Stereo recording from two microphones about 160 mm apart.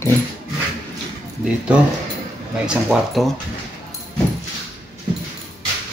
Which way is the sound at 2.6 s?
5° right (ahead or behind).